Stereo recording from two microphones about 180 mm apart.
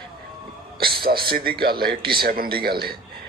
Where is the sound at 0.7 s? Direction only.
60° right (ahead or behind).